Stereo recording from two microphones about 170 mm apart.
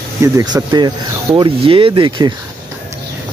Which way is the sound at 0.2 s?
20° right (ahead or behind).